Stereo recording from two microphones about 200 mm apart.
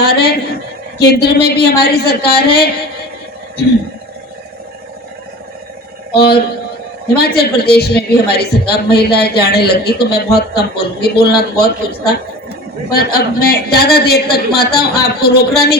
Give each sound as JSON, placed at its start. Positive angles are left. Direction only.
{"t": 0.0, "sound": "a woman's voice", "side_deg": 50}
{"t": 6.1, "sound": "a woman's voice", "side_deg": 50}